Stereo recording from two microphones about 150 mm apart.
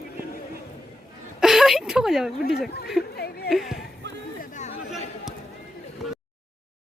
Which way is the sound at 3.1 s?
90° left.